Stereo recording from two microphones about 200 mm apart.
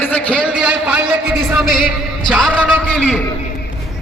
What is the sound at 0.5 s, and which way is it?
A man's voice, 5° right (ahead or behind).